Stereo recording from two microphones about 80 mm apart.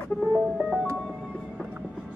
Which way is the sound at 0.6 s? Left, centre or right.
Centre.